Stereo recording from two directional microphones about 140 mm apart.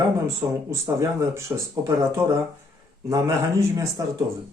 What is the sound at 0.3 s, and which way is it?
Speech, 20° right (ahead or behind).